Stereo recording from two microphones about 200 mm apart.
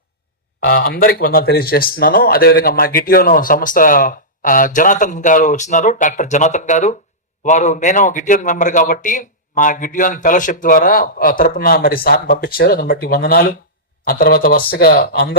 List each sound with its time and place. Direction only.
0.6 s speech: 45° left (ahead or behind)